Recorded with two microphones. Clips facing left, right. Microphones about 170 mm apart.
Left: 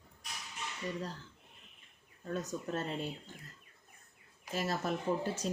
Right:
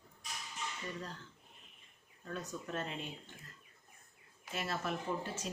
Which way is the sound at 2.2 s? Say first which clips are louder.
Left 5 dB; 40° left (ahead or behind).